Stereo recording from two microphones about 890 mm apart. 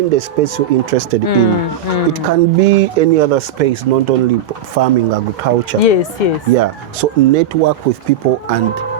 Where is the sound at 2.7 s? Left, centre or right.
Right.